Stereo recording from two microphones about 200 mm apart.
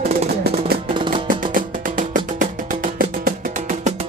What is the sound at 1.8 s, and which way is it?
Music, 40° right (ahead or behind).